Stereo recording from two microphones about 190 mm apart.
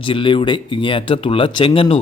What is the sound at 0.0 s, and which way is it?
A man's voice, 25° left (ahead or behind).